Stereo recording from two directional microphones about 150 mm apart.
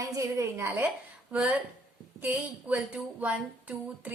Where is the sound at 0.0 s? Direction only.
20° right (ahead or behind).